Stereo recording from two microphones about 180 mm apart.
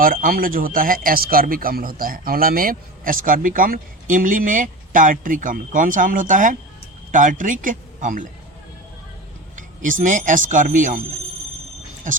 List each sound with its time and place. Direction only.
0.0 s a man's voice: 50° right (ahead or behind)
9.6 s a man's voice: 45° right (ahead or behind)
12.1 s speech: 45° right (ahead or behind)